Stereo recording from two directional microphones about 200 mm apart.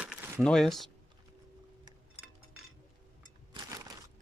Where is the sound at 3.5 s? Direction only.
15° right (ahead or behind).